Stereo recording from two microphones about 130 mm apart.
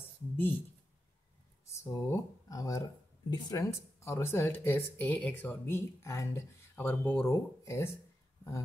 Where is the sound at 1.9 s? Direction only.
25° left (ahead or behind).